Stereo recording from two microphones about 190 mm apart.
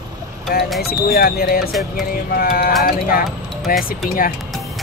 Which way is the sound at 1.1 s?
50° left (ahead or behind).